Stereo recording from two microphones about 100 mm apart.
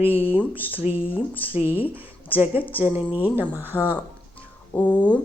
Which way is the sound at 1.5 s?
20° right (ahead or behind).